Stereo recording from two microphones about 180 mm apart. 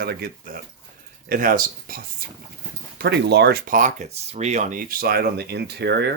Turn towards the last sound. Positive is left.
turn(degrees=-65)  # may be behind; listen again after turning